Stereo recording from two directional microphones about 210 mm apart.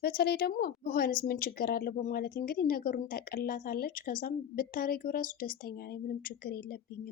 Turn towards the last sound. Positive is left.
turn(degrees=45)  # may be behind; listen again after turning